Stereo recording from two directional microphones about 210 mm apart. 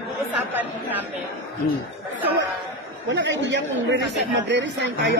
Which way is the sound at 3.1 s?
60° right (ahead or behind).